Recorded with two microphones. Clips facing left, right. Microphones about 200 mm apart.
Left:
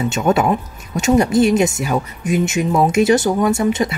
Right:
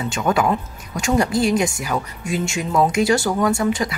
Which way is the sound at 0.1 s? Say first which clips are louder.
Left 1 dB; 25° left (ahead or behind).